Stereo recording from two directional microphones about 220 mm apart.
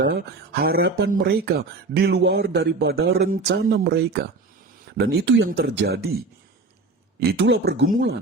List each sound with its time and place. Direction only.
0.1 s speech: 45° right (ahead or behind)